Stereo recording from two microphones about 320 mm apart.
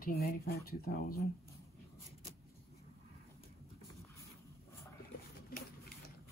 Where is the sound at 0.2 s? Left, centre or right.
Left.